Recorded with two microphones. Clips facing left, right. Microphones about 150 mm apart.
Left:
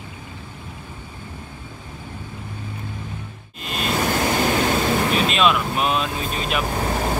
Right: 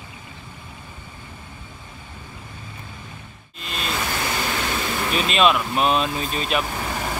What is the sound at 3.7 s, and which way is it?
Vehicle, 45° left (ahead or behind).